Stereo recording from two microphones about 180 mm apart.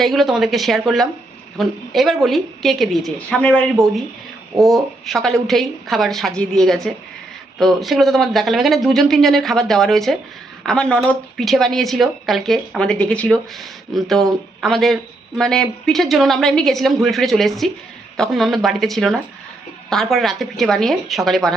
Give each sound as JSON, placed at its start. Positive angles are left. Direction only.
{"t": 0.0, "sound": "speech", "side_deg": 0}